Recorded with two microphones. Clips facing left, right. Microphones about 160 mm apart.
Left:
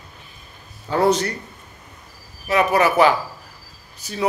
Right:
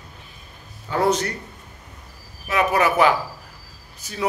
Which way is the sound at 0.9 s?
35° left (ahead or behind).